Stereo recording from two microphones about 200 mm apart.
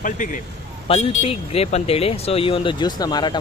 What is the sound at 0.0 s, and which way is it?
Speech, 40° left (ahead or behind).